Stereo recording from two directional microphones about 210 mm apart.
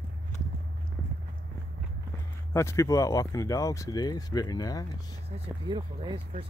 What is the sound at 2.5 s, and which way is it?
Speech, 15° left (ahead or behind).